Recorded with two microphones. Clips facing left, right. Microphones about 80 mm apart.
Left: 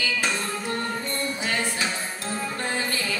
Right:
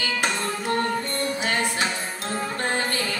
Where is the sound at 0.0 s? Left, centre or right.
Right.